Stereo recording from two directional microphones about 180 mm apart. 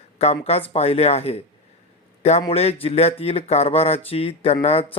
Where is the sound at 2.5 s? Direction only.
35° left (ahead or behind).